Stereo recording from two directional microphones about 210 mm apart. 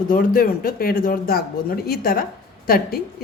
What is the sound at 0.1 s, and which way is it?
A woman's voice, 45° left (ahead or behind).